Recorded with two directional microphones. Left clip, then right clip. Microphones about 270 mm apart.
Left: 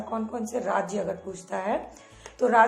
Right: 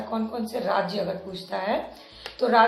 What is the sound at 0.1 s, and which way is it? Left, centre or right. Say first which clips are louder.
Speech: even; left.